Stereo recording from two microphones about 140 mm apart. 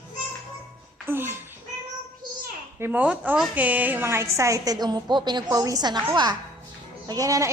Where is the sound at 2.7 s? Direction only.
15° right (ahead or behind).